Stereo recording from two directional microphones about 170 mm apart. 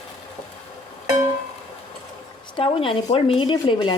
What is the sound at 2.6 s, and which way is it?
Speech, 30° left (ahead or behind).